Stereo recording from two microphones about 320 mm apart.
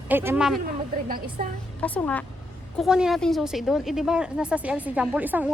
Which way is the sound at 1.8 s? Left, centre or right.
Centre.